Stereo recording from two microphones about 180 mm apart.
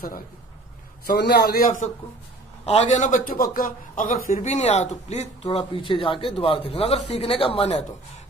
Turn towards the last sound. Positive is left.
turn(degrees=35)  # may be behind; listen again after turning